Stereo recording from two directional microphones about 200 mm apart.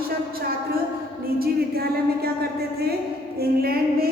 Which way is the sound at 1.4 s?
50° right (ahead or behind).